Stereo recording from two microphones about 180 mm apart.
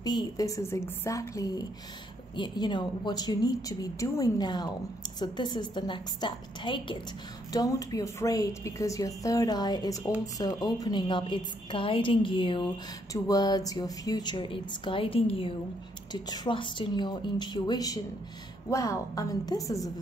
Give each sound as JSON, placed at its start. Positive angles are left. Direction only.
{"t": 0.0, "sound": "a woman's voice", "side_deg": 20}